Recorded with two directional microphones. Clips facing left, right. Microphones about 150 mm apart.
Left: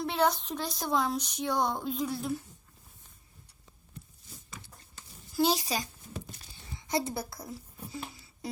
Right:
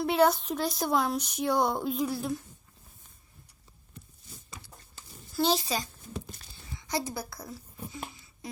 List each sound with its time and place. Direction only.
0.0 s speech: 5° right (ahead or behind)
5.4 s speech: 10° left (ahead or behind)
6.7 s a woman's voice: 25° left (ahead or behind)